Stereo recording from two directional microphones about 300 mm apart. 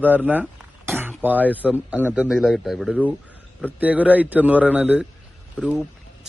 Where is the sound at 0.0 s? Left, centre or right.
Centre.